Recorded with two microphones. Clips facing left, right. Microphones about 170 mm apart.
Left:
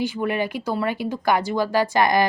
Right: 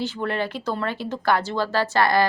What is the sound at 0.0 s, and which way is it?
A woman's voice, 10° left (ahead or behind).